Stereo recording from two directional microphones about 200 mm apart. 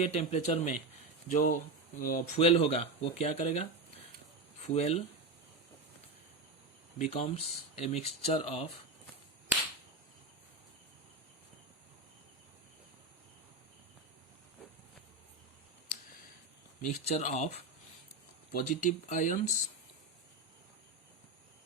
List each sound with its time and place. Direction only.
0.0 s speech: 35° left (ahead or behind)
7.0 s speech: 35° left (ahead or behind)
16.8 s speech: 35° left (ahead or behind)